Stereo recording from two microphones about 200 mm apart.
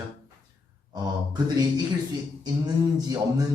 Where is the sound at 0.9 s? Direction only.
20° right (ahead or behind).